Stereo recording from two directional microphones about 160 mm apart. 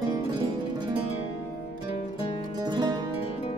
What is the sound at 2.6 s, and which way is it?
Music, 25° right (ahead or behind).